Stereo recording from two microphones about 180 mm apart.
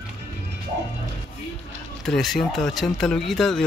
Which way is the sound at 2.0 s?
Centre (ahead or behind).